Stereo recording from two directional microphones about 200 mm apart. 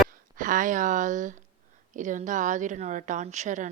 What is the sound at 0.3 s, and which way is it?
A woman's voice, 40° right (ahead or behind).